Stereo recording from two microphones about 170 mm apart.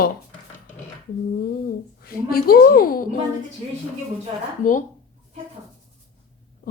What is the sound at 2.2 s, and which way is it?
Speech, 60° left (ahead or behind).